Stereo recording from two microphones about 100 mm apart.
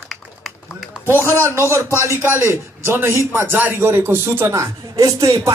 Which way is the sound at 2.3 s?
25° right (ahead or behind).